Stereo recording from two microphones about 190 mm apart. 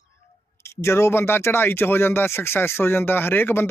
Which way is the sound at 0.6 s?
15° left (ahead or behind).